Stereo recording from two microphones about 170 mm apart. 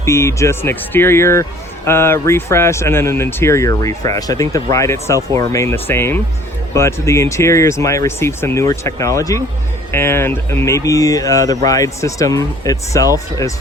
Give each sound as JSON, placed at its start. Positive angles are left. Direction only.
{"t": 0.0, "sound": "speech", "side_deg": 15}